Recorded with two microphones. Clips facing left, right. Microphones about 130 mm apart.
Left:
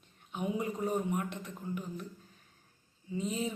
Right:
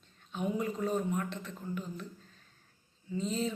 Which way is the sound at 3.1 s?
15° left (ahead or behind).